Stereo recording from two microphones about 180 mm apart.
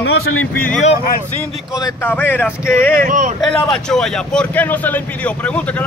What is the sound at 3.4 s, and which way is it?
Speech, 5° left (ahead or behind).